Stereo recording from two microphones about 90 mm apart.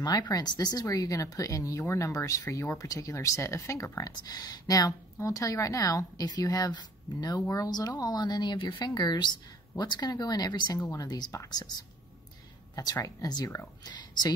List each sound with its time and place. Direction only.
0.0 s a woman's voice: 45° left (ahead or behind)
4.0 s a woman's voice: 50° left (ahead or behind)
10.8 s speech: 35° left (ahead or behind)
11.1 s a woman's voice: 50° left (ahead or behind)
12.7 s a woman's voice: 40° left (ahead or behind)